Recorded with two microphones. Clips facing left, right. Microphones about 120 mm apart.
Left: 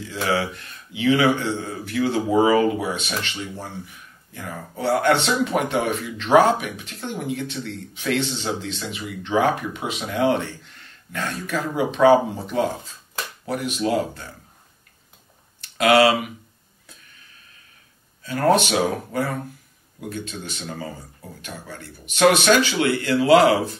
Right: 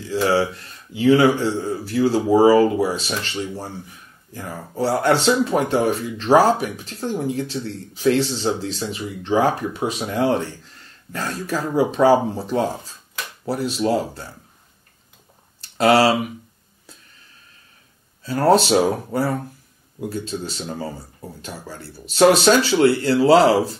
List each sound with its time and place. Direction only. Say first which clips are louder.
0.1 s speech: right 5 dB; 35° right (ahead or behind)
15.6 s speech: right 1 dB; 30° right (ahead or behind)
18.2 s speech: right 3 dB; 35° right (ahead or behind)